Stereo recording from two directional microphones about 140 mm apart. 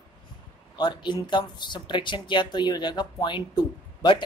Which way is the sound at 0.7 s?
35° left (ahead or behind).